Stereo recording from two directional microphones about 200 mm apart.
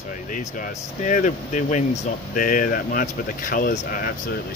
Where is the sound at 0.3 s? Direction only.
40° left (ahead or behind).